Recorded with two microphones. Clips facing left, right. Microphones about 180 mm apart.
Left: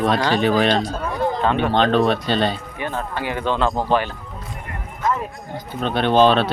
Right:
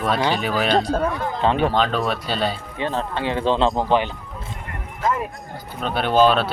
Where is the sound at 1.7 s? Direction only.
5° right (ahead or behind).